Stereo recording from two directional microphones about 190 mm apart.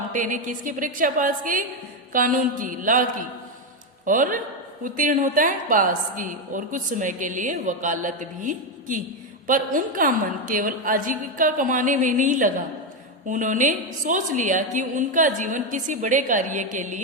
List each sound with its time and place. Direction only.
0.1 s a woman's voice: 45° right (ahead or behind)